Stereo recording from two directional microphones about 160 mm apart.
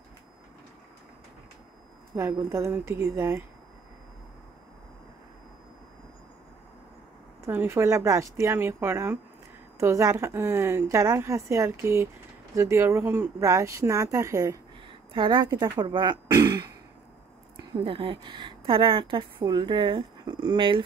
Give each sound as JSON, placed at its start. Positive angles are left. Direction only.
{"t": 2.1, "sound": "a woman's voice", "side_deg": -20}
{"t": 7.4, "sound": "a woman's voice", "side_deg": -15}
{"t": 14.9, "sound": "a sound", "side_deg": -30}
{"t": 15.6, "sound": "speech", "side_deg": -25}
{"t": 17.8, "sound": "speech", "side_deg": -30}